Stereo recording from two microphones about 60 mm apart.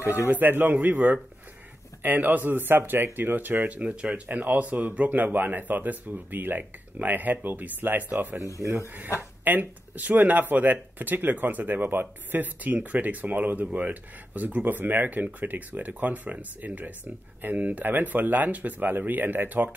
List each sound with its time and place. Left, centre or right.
0.3 s speech: right
8.6 s speech: right
9.4 s speech: right